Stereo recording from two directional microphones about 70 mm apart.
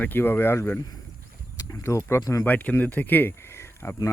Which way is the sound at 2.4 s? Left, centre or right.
Left.